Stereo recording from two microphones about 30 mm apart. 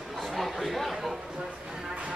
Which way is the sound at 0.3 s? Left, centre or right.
Centre.